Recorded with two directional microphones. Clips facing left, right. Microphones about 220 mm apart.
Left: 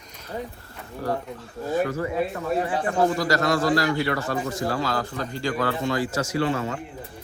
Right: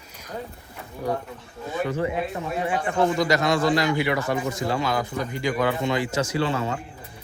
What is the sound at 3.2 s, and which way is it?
A man's voice, 20° right (ahead or behind).